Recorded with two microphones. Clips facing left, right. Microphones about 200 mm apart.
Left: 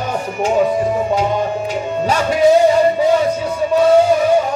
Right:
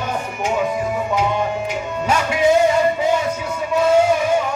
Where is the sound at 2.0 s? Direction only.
35° left (ahead or behind).